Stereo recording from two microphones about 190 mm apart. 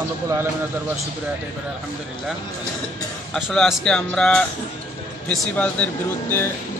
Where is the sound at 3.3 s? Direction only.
Centre (ahead or behind).